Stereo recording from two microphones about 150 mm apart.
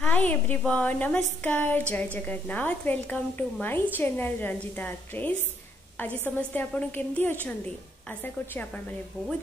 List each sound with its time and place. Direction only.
0.0 s a woman's voice: 10° left (ahead or behind)